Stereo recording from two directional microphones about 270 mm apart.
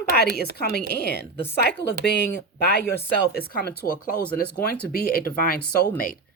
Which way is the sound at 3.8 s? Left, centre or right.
Left.